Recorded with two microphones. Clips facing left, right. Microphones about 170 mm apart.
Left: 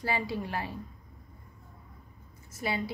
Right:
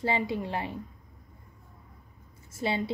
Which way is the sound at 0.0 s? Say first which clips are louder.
Right 3 dB; 20° right (ahead or behind).